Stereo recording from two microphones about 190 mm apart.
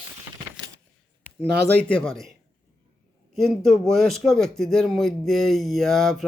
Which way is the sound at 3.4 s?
Centre (ahead or behind).